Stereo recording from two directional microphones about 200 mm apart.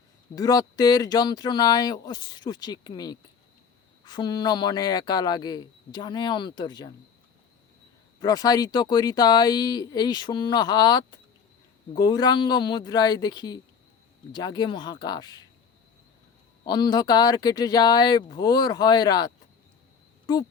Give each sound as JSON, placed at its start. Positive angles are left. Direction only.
{"t": 0.3, "sound": "speech", "side_deg": 20}
{"t": 8.2, "sound": "speech", "side_deg": 20}
{"t": 16.6, "sound": "speech", "side_deg": 20}